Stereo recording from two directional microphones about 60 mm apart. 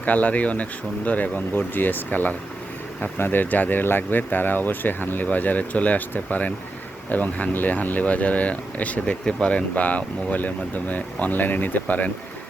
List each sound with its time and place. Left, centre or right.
0.0 s speech: left